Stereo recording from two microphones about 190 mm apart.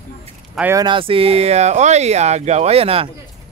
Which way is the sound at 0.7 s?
25° right (ahead or behind).